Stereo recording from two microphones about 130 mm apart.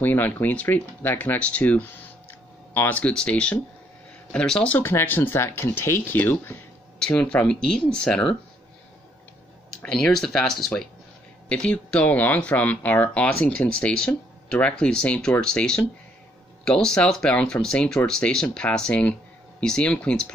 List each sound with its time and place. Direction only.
0.0 s speech: 15° left (ahead or behind)
9.8 s speech: 5° left (ahead or behind)